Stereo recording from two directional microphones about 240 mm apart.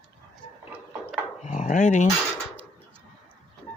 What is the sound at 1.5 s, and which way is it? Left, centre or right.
Dog, left.